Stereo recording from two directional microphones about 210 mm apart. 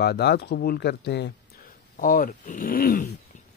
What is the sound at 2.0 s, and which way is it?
A man's voice, 40° left (ahead or behind).